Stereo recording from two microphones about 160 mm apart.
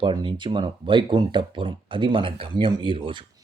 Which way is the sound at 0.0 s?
30° right (ahead or behind).